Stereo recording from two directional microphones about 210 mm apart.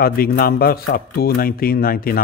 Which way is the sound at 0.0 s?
45° left (ahead or behind).